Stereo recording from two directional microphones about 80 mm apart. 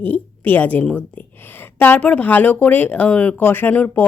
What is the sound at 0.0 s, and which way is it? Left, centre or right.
A woman's voice, left.